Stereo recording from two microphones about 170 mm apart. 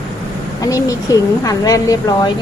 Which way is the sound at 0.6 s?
20° left (ahead or behind).